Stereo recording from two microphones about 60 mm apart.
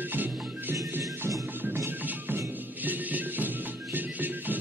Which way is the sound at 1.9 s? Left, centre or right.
Right.